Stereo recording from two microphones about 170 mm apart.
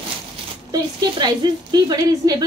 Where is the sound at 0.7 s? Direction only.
25° right (ahead or behind).